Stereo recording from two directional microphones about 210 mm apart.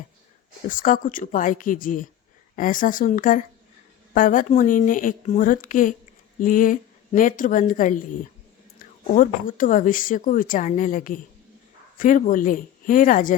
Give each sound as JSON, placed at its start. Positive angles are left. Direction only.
{"t": 0.7, "sound": "speech", "side_deg": 40}